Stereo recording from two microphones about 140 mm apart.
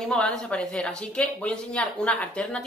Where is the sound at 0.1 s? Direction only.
5° left (ahead or behind).